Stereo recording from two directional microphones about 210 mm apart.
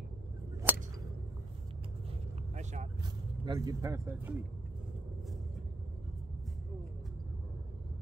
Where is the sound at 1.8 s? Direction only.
25° right (ahead or behind).